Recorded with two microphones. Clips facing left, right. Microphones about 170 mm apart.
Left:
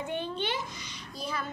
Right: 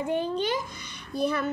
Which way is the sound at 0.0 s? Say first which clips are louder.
Right 6 dB; 35° right (ahead or behind).